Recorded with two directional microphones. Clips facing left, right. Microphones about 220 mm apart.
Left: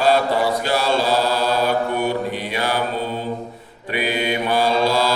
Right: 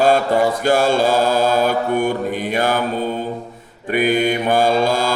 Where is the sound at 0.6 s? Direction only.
50° right (ahead or behind).